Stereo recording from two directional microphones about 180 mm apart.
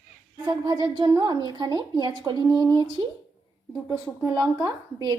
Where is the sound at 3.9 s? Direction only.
20° right (ahead or behind).